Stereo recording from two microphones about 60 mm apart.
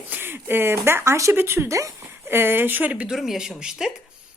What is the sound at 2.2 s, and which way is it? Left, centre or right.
Speech, right.